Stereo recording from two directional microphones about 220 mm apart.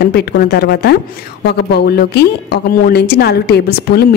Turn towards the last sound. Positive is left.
turn(degrees=45)  # may be behind; listen again after turning